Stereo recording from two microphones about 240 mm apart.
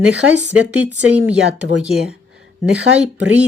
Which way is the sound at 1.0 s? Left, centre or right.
Centre.